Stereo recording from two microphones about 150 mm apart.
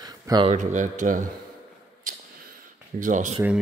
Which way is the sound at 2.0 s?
65° right (ahead or behind).